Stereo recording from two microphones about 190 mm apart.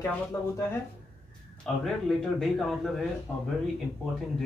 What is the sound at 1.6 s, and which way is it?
A man's voice, centre (ahead or behind).